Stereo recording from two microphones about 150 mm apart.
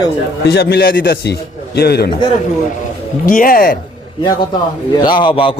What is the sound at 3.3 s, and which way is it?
Speech, 70° left (ahead or behind).